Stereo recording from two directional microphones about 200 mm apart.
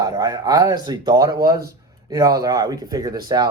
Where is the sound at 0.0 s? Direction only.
20° right (ahead or behind).